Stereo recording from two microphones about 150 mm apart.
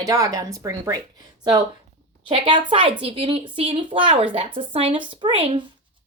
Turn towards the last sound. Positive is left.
turn(degrees=-35)  # may be behind; listen again after turning